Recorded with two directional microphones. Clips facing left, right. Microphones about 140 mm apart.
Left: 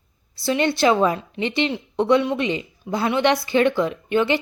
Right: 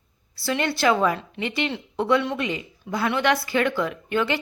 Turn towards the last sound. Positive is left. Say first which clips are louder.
# left 4 dB
turn(degrees=20)  # may be behind; listen again after turning